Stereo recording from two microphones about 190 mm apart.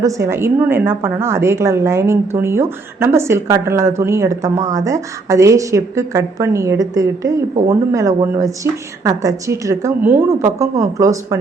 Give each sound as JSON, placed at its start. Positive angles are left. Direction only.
{"t": 0.3, "sound": "speech", "side_deg": -10}